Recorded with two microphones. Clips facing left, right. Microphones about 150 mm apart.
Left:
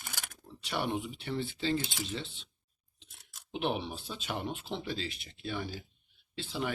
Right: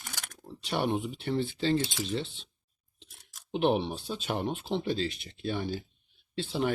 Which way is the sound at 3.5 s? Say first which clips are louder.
Right 7 dB; 40° right (ahead or behind).